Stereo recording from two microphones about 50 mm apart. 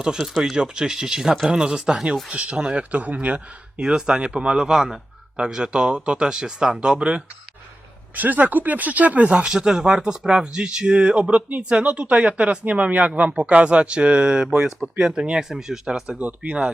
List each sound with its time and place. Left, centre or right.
0.0 s speech: centre
2.3 s speech: right
3.8 s speech: centre
4.5 s speech: centre
8.1 s speech: right
9.5 s speech: centre
16.1 s speech: right